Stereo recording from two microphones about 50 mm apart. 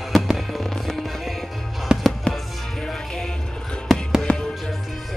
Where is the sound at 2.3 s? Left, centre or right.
Left.